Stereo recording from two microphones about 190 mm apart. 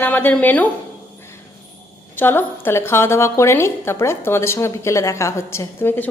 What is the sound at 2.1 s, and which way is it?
A woman's voice, 10° left (ahead or behind).